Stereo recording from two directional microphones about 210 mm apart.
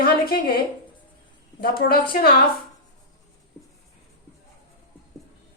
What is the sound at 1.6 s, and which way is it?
Speech, 45° left (ahead or behind).